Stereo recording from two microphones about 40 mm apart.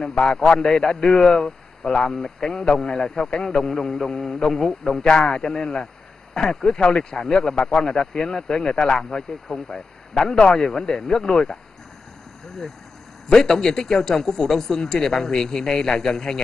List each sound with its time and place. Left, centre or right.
0.0 s speech: left
5.0 s speech: left
6.8 s speech: left
7.1 s speech: centre
9.5 s speech: centre
10.1 s speech: left
13.3 s speech: centre